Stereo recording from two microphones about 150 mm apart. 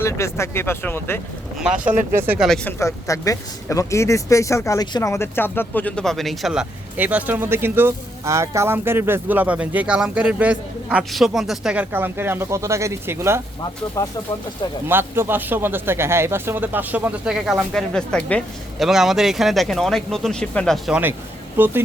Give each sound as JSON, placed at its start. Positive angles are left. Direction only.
{"t": 0.0, "sound": "speech", "side_deg": 20}
{"t": 2.1, "sound": "speech", "side_deg": -15}
{"t": 2.6, "sound": "speech", "side_deg": 20}
{"t": 14.0, "sound": "speech", "side_deg": 20}
{"t": 14.8, "sound": "speech", "side_deg": -15}
{"t": 21.6, "sound": "speech", "side_deg": -15}